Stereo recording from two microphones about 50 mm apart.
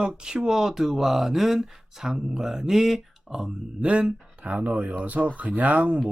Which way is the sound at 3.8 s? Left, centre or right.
Centre.